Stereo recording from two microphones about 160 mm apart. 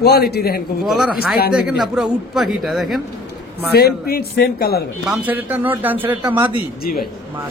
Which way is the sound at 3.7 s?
75° left (ahead or behind).